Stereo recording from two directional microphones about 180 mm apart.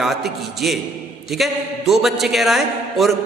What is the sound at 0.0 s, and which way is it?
A man's voice, centre (ahead or behind).